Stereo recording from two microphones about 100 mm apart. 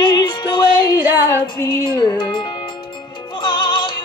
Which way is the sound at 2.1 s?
50° left (ahead or behind).